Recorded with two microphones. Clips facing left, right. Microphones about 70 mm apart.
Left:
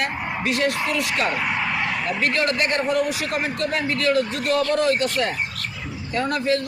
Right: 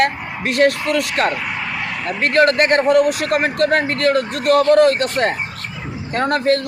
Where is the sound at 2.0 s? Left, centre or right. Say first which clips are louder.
Right 10 dB; right.